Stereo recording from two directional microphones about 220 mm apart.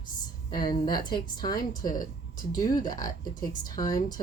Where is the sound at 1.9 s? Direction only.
40° left (ahead or behind).